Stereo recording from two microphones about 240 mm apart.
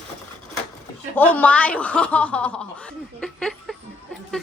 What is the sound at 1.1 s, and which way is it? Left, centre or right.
Speech, centre.